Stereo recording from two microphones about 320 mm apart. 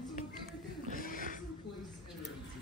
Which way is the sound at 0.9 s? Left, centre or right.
Left.